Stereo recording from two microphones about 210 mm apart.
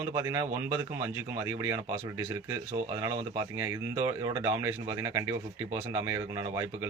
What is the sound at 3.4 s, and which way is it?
A man's voice, 15° right (ahead or behind).